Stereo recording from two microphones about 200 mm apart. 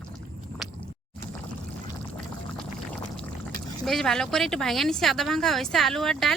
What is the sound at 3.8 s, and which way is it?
Speech, centre (ahead or behind).